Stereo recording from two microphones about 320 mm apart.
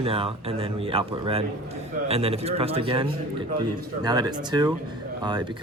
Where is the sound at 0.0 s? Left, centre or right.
Centre.